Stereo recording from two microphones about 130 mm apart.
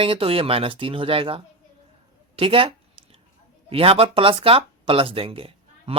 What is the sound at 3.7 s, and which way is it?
Speech, 45° right (ahead or behind).